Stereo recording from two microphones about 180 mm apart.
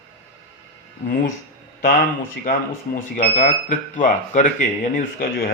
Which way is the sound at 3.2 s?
45° left (ahead or behind).